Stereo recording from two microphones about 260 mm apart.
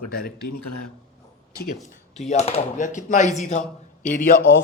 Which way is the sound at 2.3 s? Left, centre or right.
Left.